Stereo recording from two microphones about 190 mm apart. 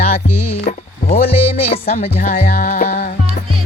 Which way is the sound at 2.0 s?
40° left (ahead or behind).